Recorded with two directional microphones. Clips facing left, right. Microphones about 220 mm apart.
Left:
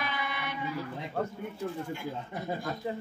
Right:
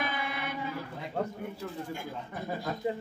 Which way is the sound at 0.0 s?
50° right (ahead or behind).